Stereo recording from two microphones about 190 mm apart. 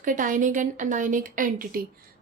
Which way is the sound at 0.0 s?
45° right (ahead or behind).